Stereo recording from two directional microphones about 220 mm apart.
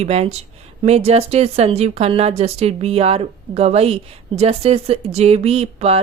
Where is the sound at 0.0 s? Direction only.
30° right (ahead or behind).